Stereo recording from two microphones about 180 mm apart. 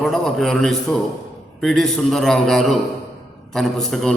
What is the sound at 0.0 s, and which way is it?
A man's voice, centre (ahead or behind).